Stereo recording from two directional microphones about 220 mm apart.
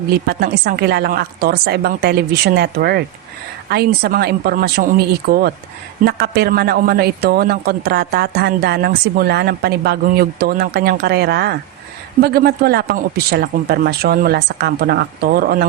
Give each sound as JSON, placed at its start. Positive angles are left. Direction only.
{"t": 0.3, "sound": "a man's voice", "side_deg": -45}